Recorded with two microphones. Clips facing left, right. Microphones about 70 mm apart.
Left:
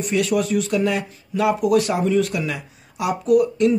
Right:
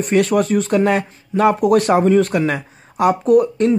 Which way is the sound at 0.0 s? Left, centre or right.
Right.